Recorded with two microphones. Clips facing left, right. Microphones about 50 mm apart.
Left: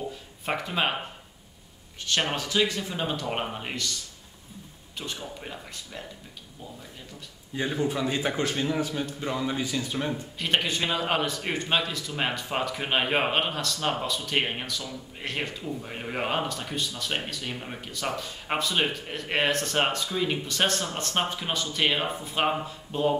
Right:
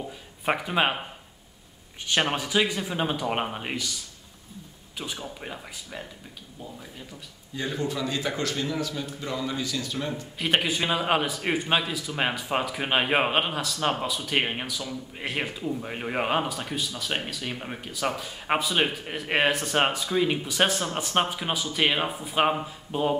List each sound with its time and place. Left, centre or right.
0.5 s a man's voice: centre
2.0 s a man's voice: centre
7.5 s a man's voice: centre
10.4 s a man's voice: centre